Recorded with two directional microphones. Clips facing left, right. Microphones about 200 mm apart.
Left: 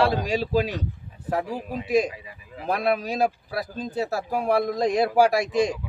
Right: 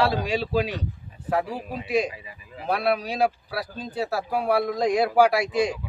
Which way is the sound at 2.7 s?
40° left (ahead or behind).